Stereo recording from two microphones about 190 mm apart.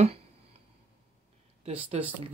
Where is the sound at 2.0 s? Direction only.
35° right (ahead or behind).